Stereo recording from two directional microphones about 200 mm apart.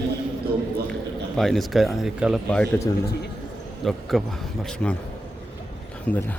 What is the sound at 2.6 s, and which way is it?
Speech, 15° left (ahead or behind).